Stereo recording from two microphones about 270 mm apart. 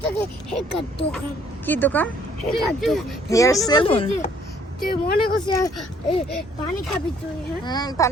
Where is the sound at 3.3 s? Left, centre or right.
Centre.